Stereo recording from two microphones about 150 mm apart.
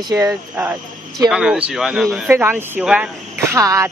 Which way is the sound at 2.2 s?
15° right (ahead or behind).